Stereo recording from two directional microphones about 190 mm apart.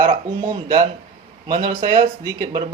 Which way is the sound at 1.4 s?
20° right (ahead or behind).